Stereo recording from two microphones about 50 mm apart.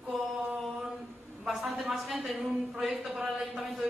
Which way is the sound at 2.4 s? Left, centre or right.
Centre.